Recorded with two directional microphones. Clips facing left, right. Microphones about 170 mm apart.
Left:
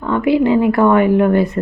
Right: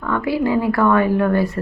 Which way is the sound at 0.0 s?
20° left (ahead or behind).